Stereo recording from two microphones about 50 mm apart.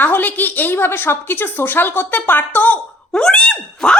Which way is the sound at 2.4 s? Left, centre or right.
Left.